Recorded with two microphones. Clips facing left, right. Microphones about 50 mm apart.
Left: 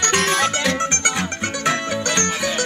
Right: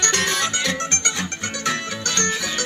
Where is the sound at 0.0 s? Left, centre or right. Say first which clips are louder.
Left 3 dB; left.